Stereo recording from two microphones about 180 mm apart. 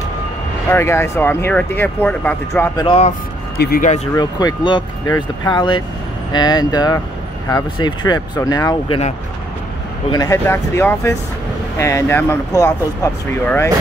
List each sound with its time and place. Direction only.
0.7 s speech: 15° left (ahead or behind)
3.5 s speech: 55° left (ahead or behind)
4.1 s speech: 20° left (ahead or behind)
10.1 s speech: 20° left (ahead or behind)